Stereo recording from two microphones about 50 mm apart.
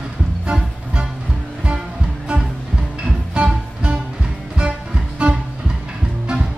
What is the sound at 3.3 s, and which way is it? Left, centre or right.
Music, right.